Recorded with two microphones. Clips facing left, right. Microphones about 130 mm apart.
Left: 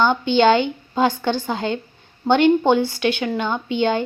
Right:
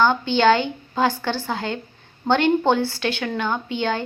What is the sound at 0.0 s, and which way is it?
A woman's voice, 20° left (ahead or behind).